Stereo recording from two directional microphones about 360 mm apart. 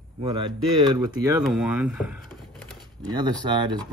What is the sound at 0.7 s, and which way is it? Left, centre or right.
Speech, centre.